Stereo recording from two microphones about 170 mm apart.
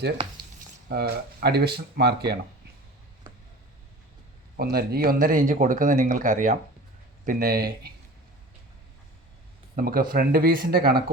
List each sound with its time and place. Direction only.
0.2 s a sound: 30° right (ahead or behind)
0.9 s speech: 70° right (ahead or behind)
4.5 s speech: 65° right (ahead or behind); by 6.6 s 50° right (ahead or behind)
7.3 s speech: 60° right (ahead or behind)
9.7 s speech: 60° right (ahead or behind)